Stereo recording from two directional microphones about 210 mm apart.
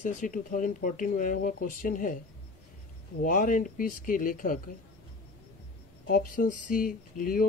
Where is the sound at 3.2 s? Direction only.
40° left (ahead or behind).